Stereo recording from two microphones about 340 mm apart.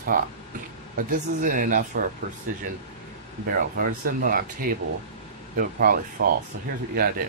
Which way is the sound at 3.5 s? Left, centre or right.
Right.